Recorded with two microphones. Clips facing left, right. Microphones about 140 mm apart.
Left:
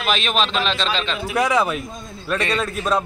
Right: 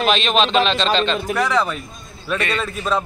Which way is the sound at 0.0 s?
5° left (ahead or behind).